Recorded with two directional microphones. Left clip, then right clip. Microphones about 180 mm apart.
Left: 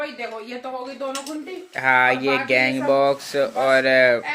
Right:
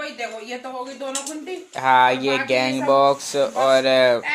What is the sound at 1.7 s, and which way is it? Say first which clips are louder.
Speech: right 1 dB; 5° right (ahead or behind).